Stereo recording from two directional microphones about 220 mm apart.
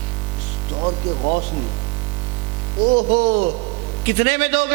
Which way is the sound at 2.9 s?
30° right (ahead or behind).